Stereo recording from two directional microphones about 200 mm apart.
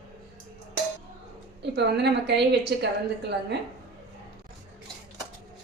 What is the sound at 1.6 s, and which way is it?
A woman's voice, 55° right (ahead or behind).